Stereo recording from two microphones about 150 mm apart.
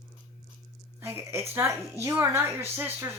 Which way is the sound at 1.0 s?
15° right (ahead or behind).